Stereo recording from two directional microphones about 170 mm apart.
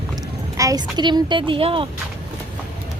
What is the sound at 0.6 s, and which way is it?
Speech, 20° right (ahead or behind).